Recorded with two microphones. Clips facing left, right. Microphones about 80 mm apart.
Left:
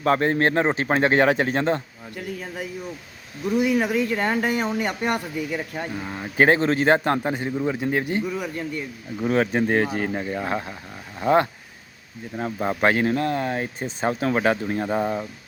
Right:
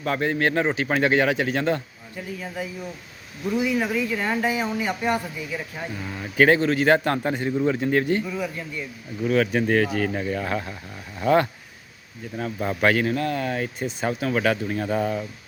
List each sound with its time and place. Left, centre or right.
0.0 s a man's voice: left
2.1 s speech: left
5.9 s speech: left
8.4 s speech: left
9.2 s speech: left